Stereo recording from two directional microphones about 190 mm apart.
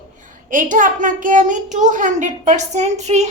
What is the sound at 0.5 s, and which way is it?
A woman's voice, 45° right (ahead or behind).